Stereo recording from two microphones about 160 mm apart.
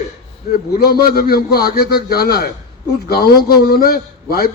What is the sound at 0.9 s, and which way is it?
A man's voice, 70° left (ahead or behind).